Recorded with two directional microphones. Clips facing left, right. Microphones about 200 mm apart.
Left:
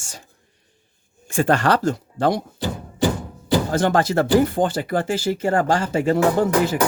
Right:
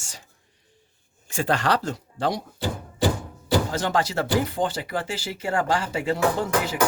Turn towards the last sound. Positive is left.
turn(degrees=50)  # may be behind; listen again after turning